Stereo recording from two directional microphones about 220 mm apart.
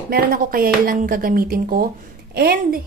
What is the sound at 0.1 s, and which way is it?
A woman's voice, 40° right (ahead or behind).